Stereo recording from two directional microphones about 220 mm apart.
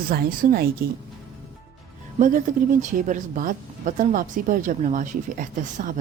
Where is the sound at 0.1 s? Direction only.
45° right (ahead or behind).